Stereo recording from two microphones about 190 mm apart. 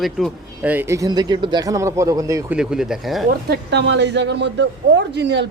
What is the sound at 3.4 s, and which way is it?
Speech, 60° right (ahead or behind).